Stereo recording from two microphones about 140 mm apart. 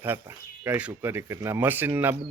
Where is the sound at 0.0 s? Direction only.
15° right (ahead or behind).